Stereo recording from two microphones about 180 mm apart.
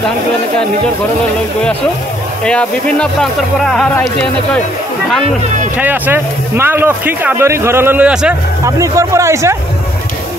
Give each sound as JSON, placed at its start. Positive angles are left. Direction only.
{"t": 2.4, "sound": "speech", "side_deg": 5}
{"t": 5.8, "sound": "speech", "side_deg": -10}
{"t": 8.6, "sound": "speech", "side_deg": -20}